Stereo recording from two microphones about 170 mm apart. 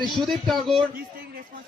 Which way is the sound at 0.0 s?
Centre (ahead or behind).